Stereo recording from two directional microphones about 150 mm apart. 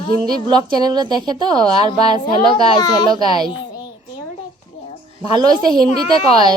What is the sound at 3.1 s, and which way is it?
Speech, 25° right (ahead or behind).